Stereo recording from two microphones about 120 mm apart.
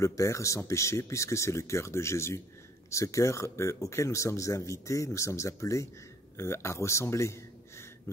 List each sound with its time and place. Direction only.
0.0 s a man's voice: 25° left (ahead or behind)